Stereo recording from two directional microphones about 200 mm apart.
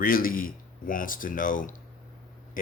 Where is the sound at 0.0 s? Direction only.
45° left (ahead or behind).